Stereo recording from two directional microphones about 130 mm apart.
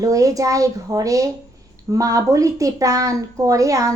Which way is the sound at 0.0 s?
25° right (ahead or behind).